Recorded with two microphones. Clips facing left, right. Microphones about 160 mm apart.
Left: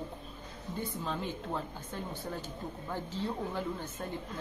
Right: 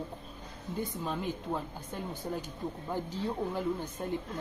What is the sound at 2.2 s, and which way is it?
Speech, 15° right (ahead or behind).